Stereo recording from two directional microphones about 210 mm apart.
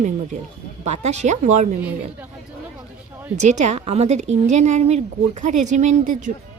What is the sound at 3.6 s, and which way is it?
A woman's voice, 30° right (ahead or behind).